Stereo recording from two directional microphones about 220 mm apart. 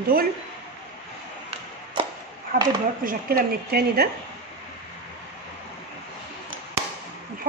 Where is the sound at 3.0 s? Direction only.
40° right (ahead or behind).